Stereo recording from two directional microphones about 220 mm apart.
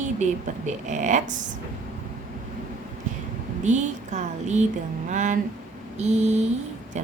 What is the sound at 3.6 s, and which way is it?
A woman's voice, 35° right (ahead or behind).